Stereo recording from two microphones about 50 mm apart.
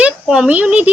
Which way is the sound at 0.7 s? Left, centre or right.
Right.